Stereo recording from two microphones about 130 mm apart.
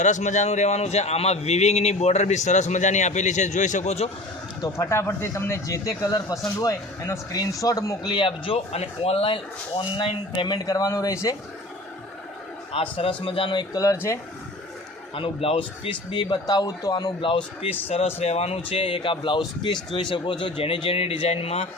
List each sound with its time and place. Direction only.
0.0 s a man's voice: 70° left (ahead or behind)
4.6 s speech: 25° left (ahead or behind)
12.7 s speech: 45° left (ahead or behind)
13.8 s speech: 20° left (ahead or behind)
15.1 s speech: 45° left (ahead or behind)